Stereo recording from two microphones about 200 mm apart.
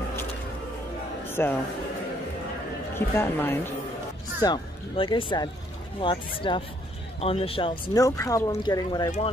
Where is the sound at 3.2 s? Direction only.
10° left (ahead or behind).